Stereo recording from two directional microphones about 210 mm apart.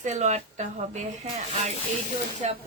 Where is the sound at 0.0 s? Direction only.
35° right (ahead or behind).